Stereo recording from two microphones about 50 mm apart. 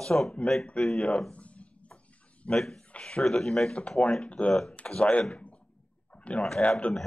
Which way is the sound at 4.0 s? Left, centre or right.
Left.